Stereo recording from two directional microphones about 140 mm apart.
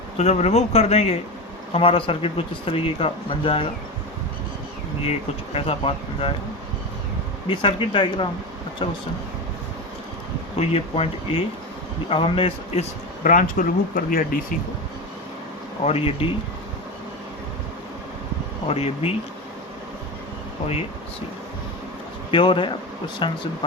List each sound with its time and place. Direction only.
0.2 s speech: 50° left (ahead or behind)
5.5 s speech: 45° left (ahead or behind)
7.4 s speech: 40° left (ahead or behind)
10.6 s speech: 50° left (ahead or behind)
13.2 s speech: 70° left (ahead or behind); by 14.3 s 90° left
15.8 s speech: 45° left (ahead or behind)
18.7 s speech: 45° left (ahead or behind)
22.3 s speech: 35° left (ahead or behind)